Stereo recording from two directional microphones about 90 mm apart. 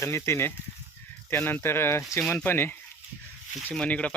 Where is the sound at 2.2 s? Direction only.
15° left (ahead or behind).